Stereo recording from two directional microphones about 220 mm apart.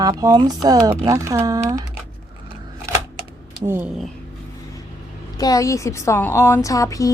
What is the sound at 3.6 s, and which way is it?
Speech, 10° right (ahead or behind).